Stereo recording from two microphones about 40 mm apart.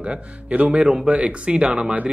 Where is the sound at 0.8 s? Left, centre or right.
Centre.